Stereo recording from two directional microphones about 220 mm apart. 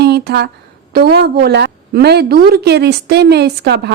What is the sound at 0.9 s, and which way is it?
A woman's voice, 45° right (ahead or behind).